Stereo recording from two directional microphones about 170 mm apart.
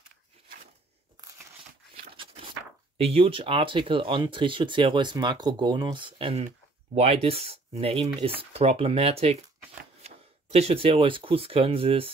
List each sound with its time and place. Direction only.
3.0 s speech: 35° right (ahead or behind)